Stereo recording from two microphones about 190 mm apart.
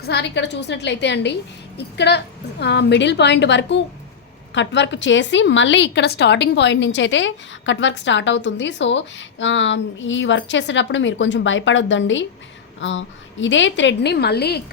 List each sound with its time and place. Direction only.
0.0 s a woman's voice: 60° left (ahead or behind)